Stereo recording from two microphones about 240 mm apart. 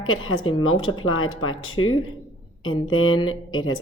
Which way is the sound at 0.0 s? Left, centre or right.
Left.